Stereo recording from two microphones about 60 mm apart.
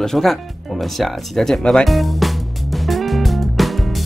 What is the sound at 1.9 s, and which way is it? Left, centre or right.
Music, centre.